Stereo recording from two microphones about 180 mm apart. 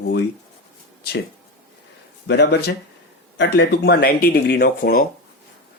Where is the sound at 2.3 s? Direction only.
70° left (ahead or behind); by 5.0 s 55° left (ahead or behind).